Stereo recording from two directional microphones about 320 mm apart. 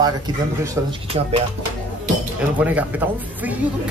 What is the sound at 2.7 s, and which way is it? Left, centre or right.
Speech, centre.